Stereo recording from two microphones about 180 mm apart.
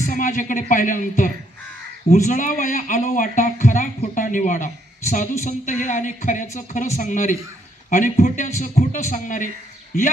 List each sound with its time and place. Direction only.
0.0 s speech: 45° left (ahead or behind)